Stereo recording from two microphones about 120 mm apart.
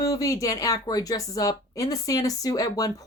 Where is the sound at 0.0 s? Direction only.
30° left (ahead or behind).